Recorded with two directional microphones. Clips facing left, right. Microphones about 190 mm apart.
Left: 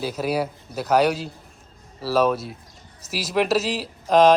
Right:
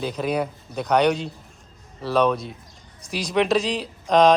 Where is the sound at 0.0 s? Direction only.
5° left (ahead or behind).